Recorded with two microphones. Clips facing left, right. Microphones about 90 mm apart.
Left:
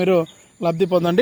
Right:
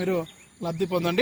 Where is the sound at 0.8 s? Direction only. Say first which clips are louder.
Left 6 dB; 50° left (ahead or behind).